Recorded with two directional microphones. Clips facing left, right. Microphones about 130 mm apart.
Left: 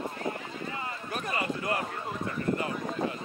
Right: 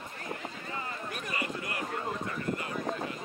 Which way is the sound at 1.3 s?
35° left (ahead or behind).